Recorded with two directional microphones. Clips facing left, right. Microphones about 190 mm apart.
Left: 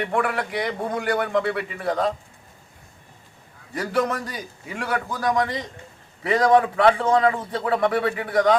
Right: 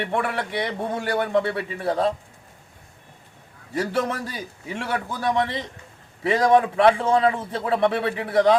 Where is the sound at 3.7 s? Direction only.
25° right (ahead or behind).